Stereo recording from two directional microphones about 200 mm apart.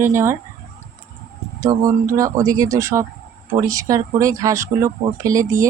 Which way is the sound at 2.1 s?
15° right (ahead or behind).